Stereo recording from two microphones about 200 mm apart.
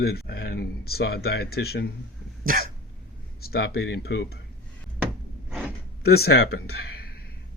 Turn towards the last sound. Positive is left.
turn(degrees=55)  # may be behind; listen again after turning